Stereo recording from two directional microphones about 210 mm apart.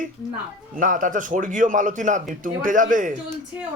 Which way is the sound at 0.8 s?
40° right (ahead or behind).